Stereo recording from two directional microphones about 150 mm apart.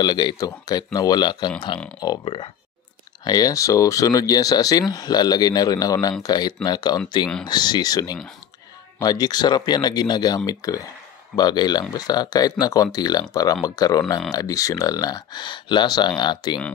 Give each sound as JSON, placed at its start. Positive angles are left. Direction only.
{"t": 0.0, "sound": "speech", "side_deg": 30}